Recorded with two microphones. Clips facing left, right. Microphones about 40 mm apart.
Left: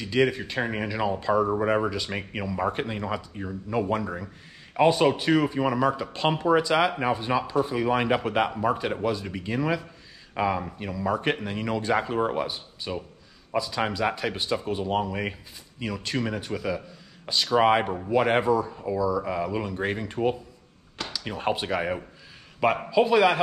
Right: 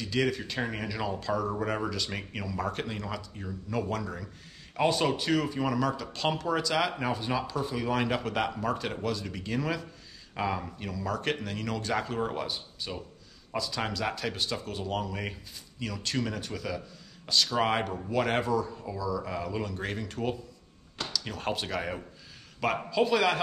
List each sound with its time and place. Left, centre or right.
0.0 s speech: centre